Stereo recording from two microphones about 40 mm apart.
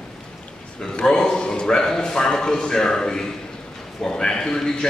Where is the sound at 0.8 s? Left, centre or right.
Centre.